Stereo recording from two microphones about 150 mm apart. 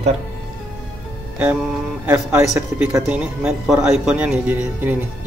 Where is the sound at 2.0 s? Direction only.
15° right (ahead or behind).